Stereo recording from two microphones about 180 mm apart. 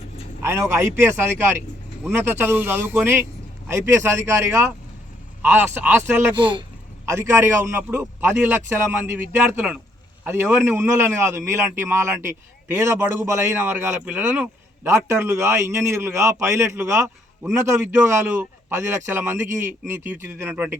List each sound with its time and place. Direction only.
0.4 s a man's voice: 15° right (ahead or behind)
6.3 s speech: 25° right (ahead or behind)
7.0 s a man's voice: 15° right (ahead or behind)